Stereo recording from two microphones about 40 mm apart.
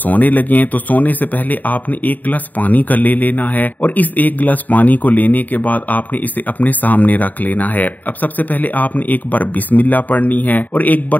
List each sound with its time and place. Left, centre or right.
0.0 s speech: left